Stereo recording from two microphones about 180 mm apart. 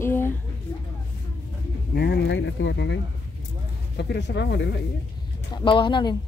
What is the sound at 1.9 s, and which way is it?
Speech, 65° left (ahead or behind).